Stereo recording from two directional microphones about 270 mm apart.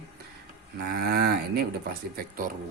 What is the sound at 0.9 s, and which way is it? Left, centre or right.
Speech, right.